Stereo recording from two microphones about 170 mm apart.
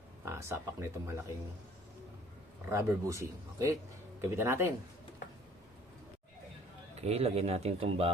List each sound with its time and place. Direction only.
0.3 s a man's voice: 15° right (ahead or behind)
2.6 s a man's voice: 15° right (ahead or behind)
7.0 s speech: 35° right (ahead or behind)